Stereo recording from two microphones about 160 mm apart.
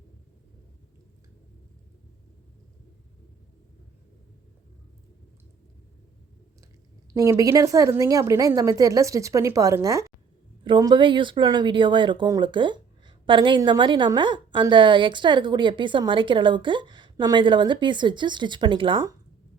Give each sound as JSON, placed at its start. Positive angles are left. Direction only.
{"t": 7.1, "sound": "speech", "side_deg": -20}